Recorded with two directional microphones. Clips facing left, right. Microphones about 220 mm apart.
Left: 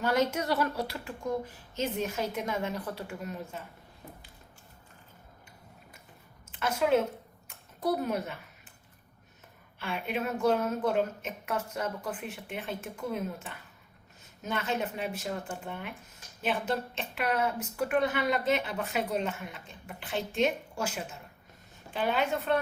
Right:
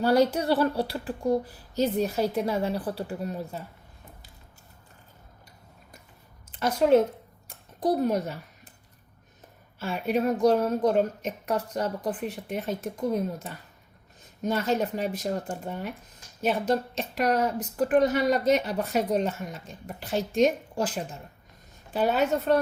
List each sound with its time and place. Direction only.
0.0 s a woman's voice: 35° right (ahead or behind)
6.5 s a woman's voice: 35° right (ahead or behind)
7.4 s a sound: 35° right (ahead or behind)
9.7 s a woman's voice: 40° right (ahead or behind)